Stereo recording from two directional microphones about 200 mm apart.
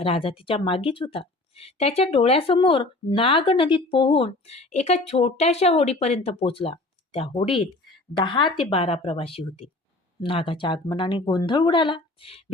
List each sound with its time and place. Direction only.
0.0 s speech: 30° left (ahead or behind)